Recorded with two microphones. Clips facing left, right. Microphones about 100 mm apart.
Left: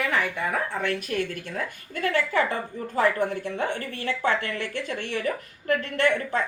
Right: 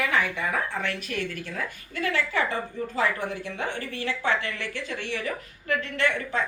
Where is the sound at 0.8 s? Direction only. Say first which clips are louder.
Left 4 dB; 40° left (ahead or behind).